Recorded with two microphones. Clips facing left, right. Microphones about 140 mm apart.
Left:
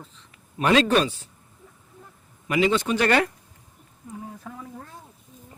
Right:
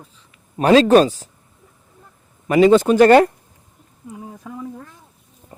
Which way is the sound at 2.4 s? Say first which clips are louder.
Right 10 dB; 45° right (ahead or behind).